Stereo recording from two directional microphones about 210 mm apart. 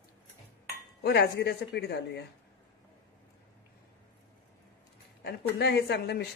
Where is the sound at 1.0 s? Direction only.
50° left (ahead or behind).